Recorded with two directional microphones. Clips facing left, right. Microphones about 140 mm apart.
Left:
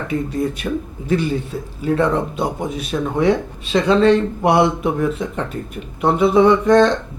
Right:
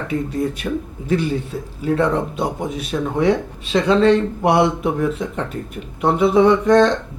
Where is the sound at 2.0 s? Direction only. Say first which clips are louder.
Left 1 dB; 20° left (ahead or behind).